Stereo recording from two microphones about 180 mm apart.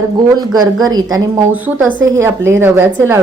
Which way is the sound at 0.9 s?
20° right (ahead or behind).